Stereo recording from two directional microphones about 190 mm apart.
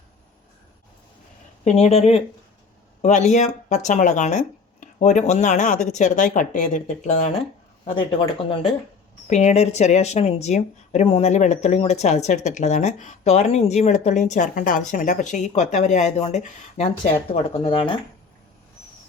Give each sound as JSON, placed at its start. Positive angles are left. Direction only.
{"t": 1.6, "sound": "speech", "side_deg": 35}
{"t": 7.9, "sound": "speech", "side_deg": 30}